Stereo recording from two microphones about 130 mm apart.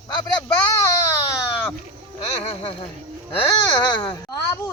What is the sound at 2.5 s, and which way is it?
Speech, 45° left (ahead or behind).